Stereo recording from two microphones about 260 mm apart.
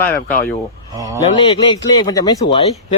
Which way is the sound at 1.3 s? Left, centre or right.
Centre.